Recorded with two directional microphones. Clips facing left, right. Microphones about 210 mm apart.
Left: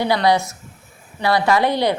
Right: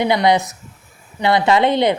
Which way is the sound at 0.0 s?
20° right (ahead or behind).